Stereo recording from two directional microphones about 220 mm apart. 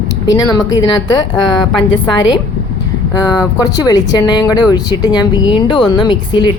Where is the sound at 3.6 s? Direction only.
15° left (ahead or behind).